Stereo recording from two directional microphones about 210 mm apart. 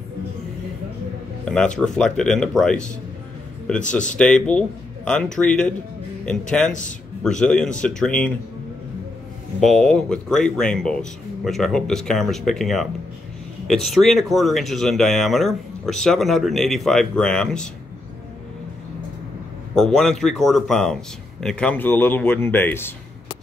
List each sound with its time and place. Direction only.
1.4 s a man's voice: 5° left (ahead or behind)
9.6 s speech: centre (ahead or behind)
19.7 s speech: centre (ahead or behind)